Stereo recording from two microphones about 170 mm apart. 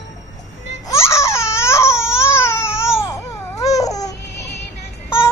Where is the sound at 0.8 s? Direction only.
15° left (ahead or behind).